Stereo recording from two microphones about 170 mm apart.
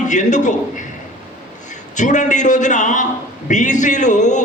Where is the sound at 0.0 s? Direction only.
45° left (ahead or behind).